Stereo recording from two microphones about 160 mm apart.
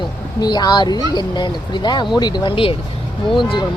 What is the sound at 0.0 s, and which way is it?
Speech, 25° left (ahead or behind).